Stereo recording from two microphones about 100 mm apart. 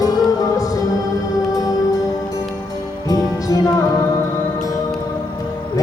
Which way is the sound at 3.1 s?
35° left (ahead or behind).